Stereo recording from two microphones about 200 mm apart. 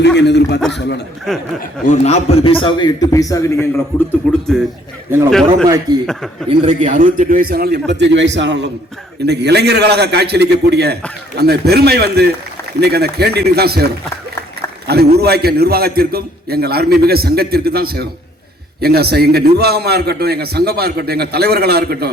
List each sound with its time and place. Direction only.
0.2 s speech: 60° left (ahead or behind)
1.3 s a man's voice: centre (ahead or behind)
1.9 s a man's voice: 30° left (ahead or behind)
4.2 s a man's voice: centre (ahead or behind)
5.6 s a man's voice: 15° right (ahead or behind)
6.8 s a man's voice: 40° right (ahead or behind)